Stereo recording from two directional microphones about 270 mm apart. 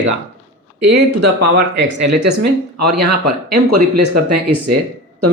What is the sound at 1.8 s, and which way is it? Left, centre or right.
Speech, right.